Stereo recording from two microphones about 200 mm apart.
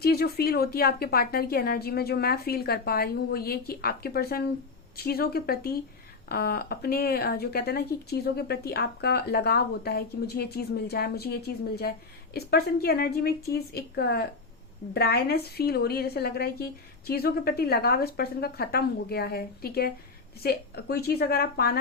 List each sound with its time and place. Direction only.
0.0 s speech: 50° left (ahead or behind)